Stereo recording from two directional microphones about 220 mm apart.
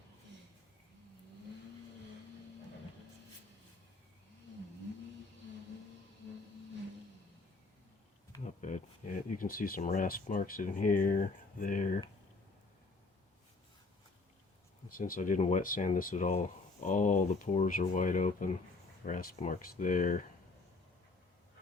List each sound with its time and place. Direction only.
8.4 s a sound: 35° left (ahead or behind)
9.4 s speech: 40° left (ahead or behind)
14.8 s speech: 40° left (ahead or behind)